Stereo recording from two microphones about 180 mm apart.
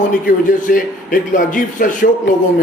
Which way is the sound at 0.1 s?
50° left (ahead or behind).